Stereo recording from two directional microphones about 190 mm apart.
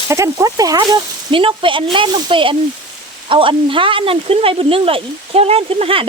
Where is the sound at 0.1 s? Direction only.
15° right (ahead or behind).